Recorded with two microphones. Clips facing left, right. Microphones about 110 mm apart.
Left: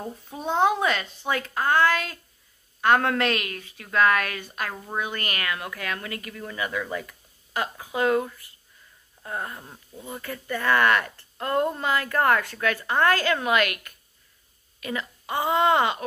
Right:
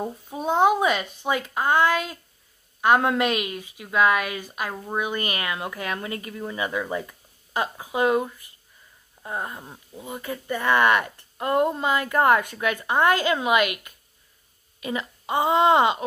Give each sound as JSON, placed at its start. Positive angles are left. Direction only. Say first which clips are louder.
{"t": 0.0, "sound": "a woman's voice", "louder": "right 4 dB", "side_deg": -15}